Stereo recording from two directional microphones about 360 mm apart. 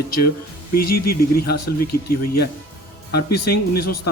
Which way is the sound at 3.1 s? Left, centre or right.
Left.